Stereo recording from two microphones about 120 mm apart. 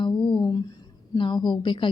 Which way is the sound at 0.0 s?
40° left (ahead or behind).